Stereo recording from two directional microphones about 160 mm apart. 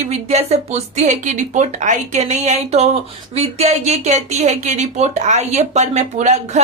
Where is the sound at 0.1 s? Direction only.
40° right (ahead or behind).